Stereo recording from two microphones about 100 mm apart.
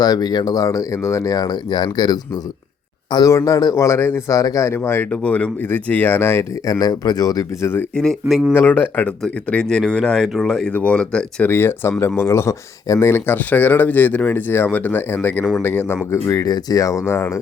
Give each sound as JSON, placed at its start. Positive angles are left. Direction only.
{"t": 0.0, "sound": "speech", "side_deg": 45}
{"t": 3.2, "sound": "speech", "side_deg": 35}
{"t": 5.1, "sound": "speech", "side_deg": 10}
{"t": 6.7, "sound": "speech", "side_deg": 40}
{"t": 7.9, "sound": "speech", "side_deg": 5}
{"t": 8.5, "sound": "speech", "side_deg": 15}
{"t": 11.4, "sound": "speech", "side_deg": 25}
{"t": 16.2, "sound": "speech", "side_deg": 35}